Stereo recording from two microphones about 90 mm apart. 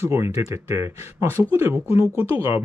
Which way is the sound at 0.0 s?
30° right (ahead or behind).